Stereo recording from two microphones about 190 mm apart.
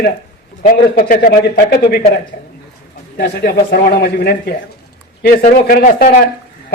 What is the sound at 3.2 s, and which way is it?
A man's voice, 55° left (ahead or behind).